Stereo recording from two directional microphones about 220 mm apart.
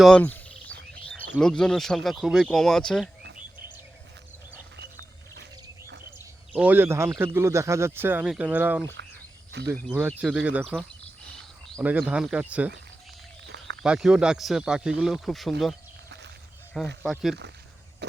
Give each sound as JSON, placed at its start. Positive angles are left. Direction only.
{"t": 0.0, "sound": "speech", "side_deg": 5}
{"t": 6.5, "sound": "speech", "side_deg": -5}
{"t": 13.8, "sound": "speech", "side_deg": -5}
{"t": 16.0, "sound": "a sound", "side_deg": -50}
{"t": 17.0, "sound": "speech", "side_deg": 0}